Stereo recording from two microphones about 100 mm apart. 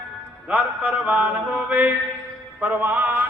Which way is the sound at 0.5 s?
15° right (ahead or behind).